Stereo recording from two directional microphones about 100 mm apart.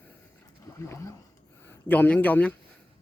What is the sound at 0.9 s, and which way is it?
Speech, 30° left (ahead or behind).